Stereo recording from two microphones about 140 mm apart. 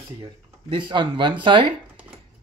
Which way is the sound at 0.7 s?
35° right (ahead or behind).